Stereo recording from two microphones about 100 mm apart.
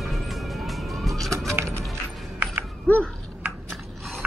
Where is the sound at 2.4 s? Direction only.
20° right (ahead or behind).